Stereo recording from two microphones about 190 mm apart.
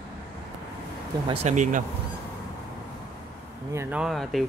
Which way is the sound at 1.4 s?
40° right (ahead or behind).